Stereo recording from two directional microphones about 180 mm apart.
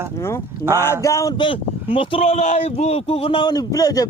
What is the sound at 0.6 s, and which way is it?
Speech, 15° left (ahead or behind).